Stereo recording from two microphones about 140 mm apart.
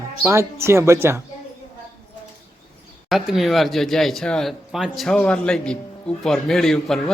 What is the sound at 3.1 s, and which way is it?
Speech, centre (ahead or behind).